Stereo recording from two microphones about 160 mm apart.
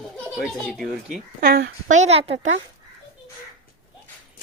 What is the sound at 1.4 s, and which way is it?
Speech, 70° right (ahead or behind).